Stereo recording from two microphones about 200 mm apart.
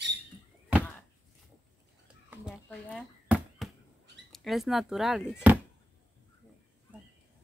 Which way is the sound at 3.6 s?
Centre (ahead or behind).